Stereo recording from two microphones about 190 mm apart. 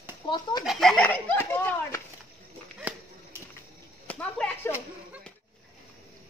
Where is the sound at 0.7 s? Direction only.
Centre (ahead or behind).